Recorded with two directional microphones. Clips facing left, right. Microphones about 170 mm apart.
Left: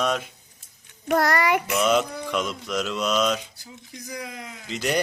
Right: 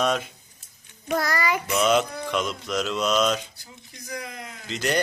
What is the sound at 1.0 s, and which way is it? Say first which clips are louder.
Speech: left 4 dB; 65° left (ahead or behind).